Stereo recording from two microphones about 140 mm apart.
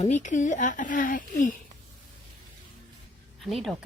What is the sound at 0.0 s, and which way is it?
Speech, 55° left (ahead or behind).